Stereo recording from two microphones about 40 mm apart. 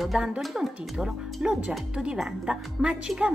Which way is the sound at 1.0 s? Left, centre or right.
Centre.